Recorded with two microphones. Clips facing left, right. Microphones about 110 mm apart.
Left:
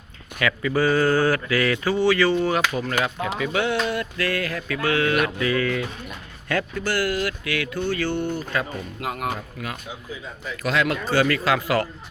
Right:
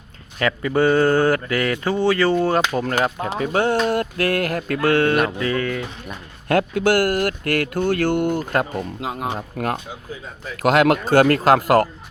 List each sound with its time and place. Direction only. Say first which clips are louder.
0.3 s speech: right 3 dB; 35° right (ahead or behind)
2.7 s speech: right 4 dB; 40° right (ahead or behind)
6.5 s speech: right 8 dB; 55° right (ahead or behind)
9.0 s speech: left 2 dB; 25° right (ahead or behind)
10.6 s speech: right 8 dB; 55° right (ahead or behind)